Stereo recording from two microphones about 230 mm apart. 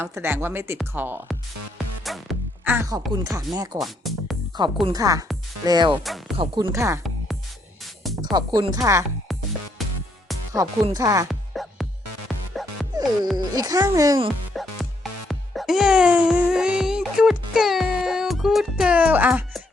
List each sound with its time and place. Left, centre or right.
0.0 s speech: centre
2.0 s music: centre
3.2 s speech: centre
3.8 s speech: centre
4.9 s speech: centre
6.0 s music: centre
6.3 s speech: right
8.2 s speech: centre
9.3 s music: centre
10.5 s speech: centre
11.3 s music: centre
13.3 s speech: centre
14.5 s music: centre